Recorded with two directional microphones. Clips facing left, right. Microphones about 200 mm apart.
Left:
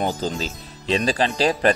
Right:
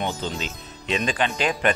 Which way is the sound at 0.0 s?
35° left (ahead or behind).